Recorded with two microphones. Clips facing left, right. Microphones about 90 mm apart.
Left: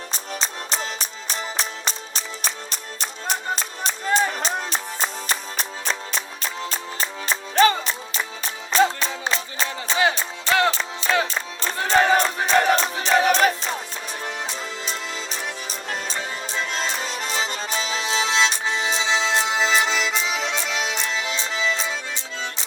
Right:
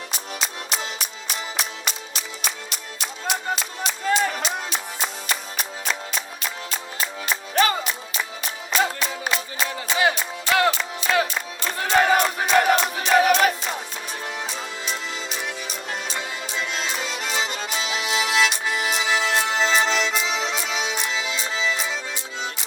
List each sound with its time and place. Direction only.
0.1 s music: 35° left (ahead or behind)
16.0 s music: 35° left (ahead or behind); by 19.7 s 15° left (ahead or behind)
19.8 s music: centre (ahead or behind)